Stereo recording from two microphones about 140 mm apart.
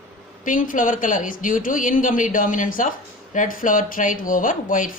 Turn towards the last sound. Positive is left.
turn(degrees=70)  # may be behind; listen again after turning